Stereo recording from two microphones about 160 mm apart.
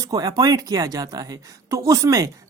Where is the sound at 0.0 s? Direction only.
20° right (ahead or behind).